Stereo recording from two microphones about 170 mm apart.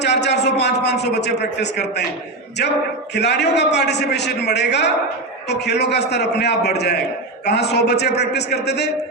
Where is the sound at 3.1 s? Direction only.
85° left.